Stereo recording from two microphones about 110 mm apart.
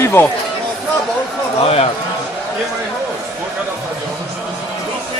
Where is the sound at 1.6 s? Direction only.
60° left (ahead or behind).